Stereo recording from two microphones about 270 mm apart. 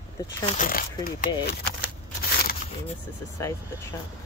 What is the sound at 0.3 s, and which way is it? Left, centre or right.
Speech, centre.